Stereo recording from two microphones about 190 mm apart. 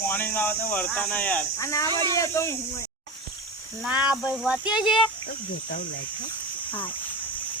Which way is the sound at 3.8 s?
5° right (ahead or behind).